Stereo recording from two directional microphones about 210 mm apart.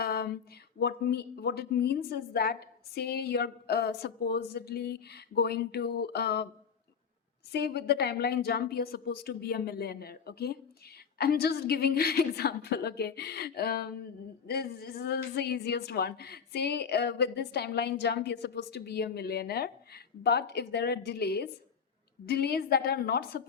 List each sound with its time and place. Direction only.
0.0 s a sound: 45° left (ahead or behind)
0.8 s a woman's voice: 50° left (ahead or behind)
7.5 s a woman's voice: 50° left (ahead or behind)